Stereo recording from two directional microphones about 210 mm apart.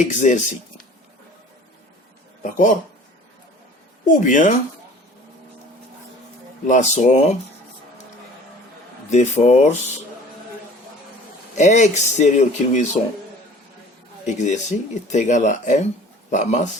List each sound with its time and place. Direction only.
0.0 s speech: 35° left (ahead or behind)
2.4 s speech: 40° left (ahead or behind)
4.0 s speech: 35° left (ahead or behind)
6.7 s speech: 35° left (ahead or behind)
9.0 s speech: 35° left (ahead or behind)
11.5 s speech: 35° left (ahead or behind)
14.3 s speech: 35° left (ahead or behind)